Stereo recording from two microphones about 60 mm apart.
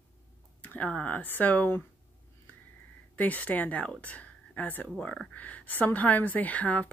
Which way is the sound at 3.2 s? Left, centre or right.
Left.